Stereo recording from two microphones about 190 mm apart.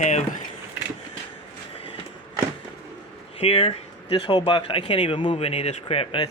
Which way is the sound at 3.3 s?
30° left (ahead or behind).